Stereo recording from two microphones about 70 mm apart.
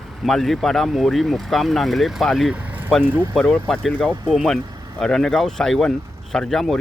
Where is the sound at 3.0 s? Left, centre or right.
Right.